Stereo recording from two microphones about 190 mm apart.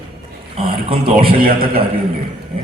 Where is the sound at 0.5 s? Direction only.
30° right (ahead or behind).